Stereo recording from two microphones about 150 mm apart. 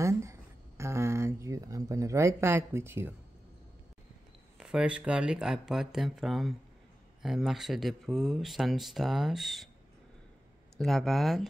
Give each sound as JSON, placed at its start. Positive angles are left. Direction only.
{"t": 0.0, "sound": "a sound", "side_deg": -20}
{"t": 4.6, "sound": "speech", "side_deg": -5}
{"t": 10.8, "sound": "speech", "side_deg": 0}